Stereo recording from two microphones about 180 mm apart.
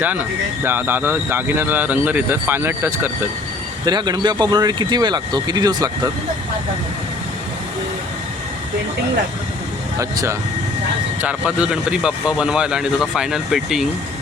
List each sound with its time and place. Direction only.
0.6 s speech: 10° right (ahead or behind)
3.8 s speech: 25° right (ahead or behind)
10.0 s speech: 15° right (ahead or behind)
11.2 s speech: 5° right (ahead or behind)